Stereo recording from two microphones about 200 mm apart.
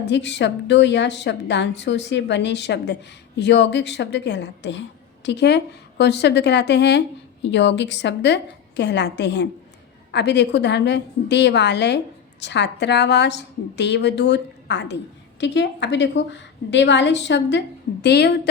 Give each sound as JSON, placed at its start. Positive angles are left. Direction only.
{"t": 0.0, "sound": "a woman's voice", "side_deg": 60}